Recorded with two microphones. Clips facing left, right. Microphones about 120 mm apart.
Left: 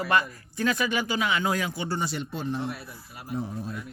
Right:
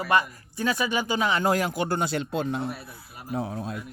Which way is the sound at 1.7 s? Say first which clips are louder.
Right 4 dB; 50° right (ahead or behind).